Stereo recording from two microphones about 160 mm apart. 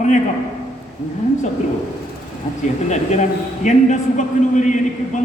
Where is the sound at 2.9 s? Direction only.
50° left (ahead or behind).